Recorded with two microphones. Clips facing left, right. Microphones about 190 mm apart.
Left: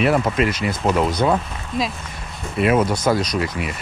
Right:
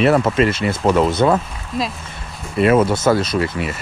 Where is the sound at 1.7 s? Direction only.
Centre (ahead or behind).